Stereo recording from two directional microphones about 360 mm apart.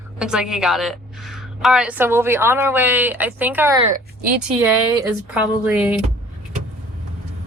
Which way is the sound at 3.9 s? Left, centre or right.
Right.